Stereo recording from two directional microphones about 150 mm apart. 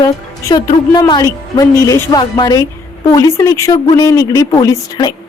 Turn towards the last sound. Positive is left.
turn(degrees=25)  # may be behind; listen again after turning